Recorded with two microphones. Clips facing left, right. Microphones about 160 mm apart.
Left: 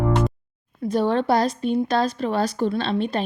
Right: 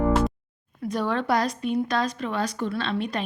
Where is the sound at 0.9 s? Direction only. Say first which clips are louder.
Left 5 dB; 30° left (ahead or behind).